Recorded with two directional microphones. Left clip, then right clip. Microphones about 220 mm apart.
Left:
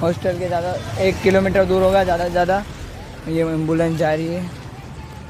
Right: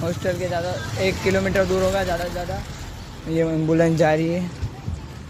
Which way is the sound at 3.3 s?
5° left (ahead or behind).